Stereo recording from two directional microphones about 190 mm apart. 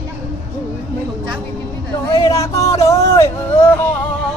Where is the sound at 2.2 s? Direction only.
15° left (ahead or behind).